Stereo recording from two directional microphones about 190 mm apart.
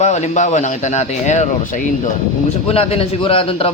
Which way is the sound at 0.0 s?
40° left (ahead or behind).